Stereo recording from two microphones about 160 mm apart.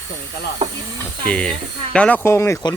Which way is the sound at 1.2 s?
10° left (ahead or behind).